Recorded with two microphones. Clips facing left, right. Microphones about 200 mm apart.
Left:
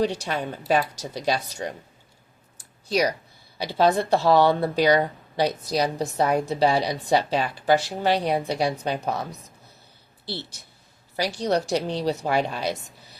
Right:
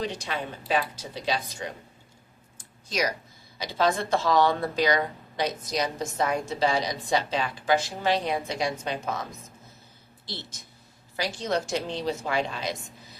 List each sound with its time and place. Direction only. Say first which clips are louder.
0.0 s speech: left 8 dB; 70° left (ahead or behind)
0.3 s speech: left 5 dB; 40° left (ahead or behind)
2.9 s speech: left 5 dB; 35° left (ahead or behind)
6.5 s speech: left 4 dB; 65° left (ahead or behind)
7.1 s speech: left 4 dB; 40° left (ahead or behind)
7.8 s speech: left 3 dB; 65° left (ahead or behind)
8.3 s speech: left 4 dB; 35° left (ahead or behind)
10.2 s speech: left 6 dB; 65° left (ahead or behind)
11.2 s speech: left 4 dB; 40° left (ahead or behind)